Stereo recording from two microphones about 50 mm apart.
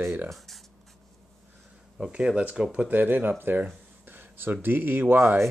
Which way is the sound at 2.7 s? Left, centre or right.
Right.